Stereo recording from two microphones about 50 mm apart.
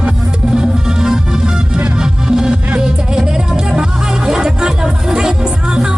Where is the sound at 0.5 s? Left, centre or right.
Centre.